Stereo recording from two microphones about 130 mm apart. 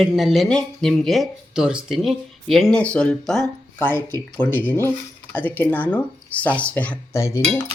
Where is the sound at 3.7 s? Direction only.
20° left (ahead or behind).